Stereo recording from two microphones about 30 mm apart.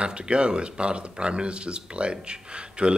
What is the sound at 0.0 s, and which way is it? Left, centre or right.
Speech, right.